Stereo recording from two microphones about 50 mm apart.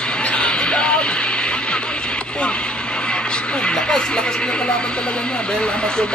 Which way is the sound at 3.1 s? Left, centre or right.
Centre.